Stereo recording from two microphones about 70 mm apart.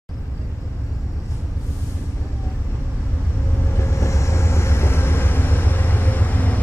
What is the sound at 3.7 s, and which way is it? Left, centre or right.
Vehicle, left.